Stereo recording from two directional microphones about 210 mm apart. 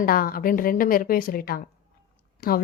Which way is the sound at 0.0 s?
45° left (ahead or behind).